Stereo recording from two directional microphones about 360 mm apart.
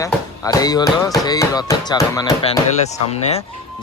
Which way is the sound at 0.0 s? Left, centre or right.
Centre.